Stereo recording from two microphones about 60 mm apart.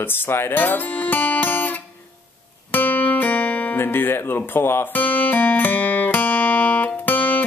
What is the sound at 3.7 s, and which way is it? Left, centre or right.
Guitar, left.